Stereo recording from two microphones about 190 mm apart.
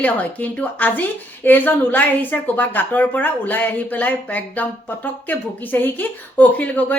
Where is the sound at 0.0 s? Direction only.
10° left (ahead or behind).